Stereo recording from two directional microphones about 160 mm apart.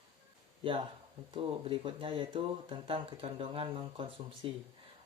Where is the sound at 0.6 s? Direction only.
35° right (ahead or behind).